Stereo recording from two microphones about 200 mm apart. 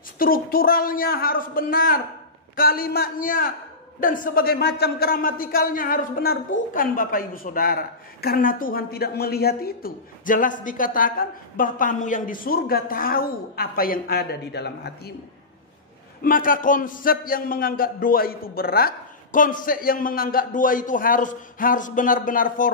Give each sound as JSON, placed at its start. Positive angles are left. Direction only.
{"t": 0.2, "sound": "a man's voice", "side_deg": 45}
{"t": 16.2, "sound": "a man's voice", "side_deg": 45}